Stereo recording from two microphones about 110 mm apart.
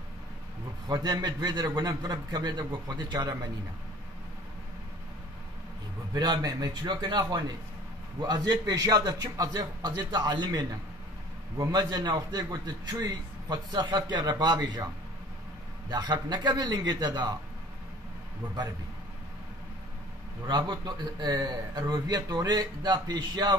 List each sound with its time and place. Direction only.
0.8 s a man's voice: 40° right (ahead or behind)
6.1 s a man's voice: 40° right (ahead or behind)
15.9 s a man's voice: 40° right (ahead or behind)
20.4 s a man's voice: 40° right (ahead or behind)